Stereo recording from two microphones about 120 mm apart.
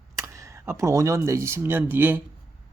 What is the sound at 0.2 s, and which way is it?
Speech, 25° right (ahead or behind).